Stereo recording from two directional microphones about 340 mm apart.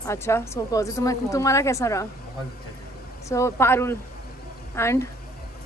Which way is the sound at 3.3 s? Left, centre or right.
Centre.